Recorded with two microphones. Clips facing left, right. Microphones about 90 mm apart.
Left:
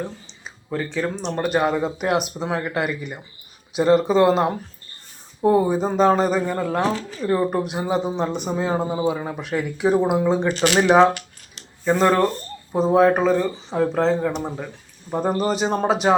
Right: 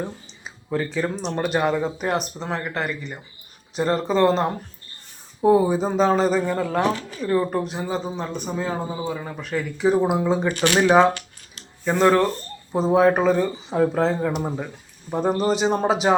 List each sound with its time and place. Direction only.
0.7 s speech: 5° right (ahead or behind)
5.4 s speech: 5° right (ahead or behind)
7.3 s speech: 15° left (ahead or behind)
9.2 s speech: 15° left (ahead or behind)
11.9 s speech: 5° left (ahead or behind)